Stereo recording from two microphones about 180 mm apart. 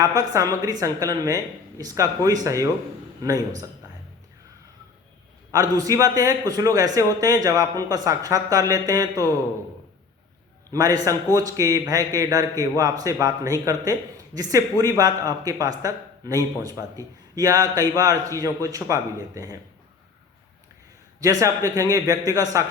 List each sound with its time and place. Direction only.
0.0 s a man's voice: 20° right (ahead or behind)
5.5 s a man's voice: 20° right (ahead or behind)
10.7 s a man's voice: 20° right (ahead or behind)
21.2 s a man's voice: 20° right (ahead or behind)